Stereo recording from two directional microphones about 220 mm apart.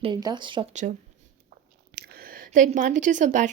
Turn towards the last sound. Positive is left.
turn(degrees=-35)  # may be behind; listen again after turning